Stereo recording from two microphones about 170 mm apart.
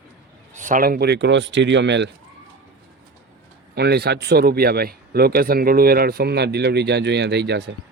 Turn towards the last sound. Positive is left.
turn(degrees=-80)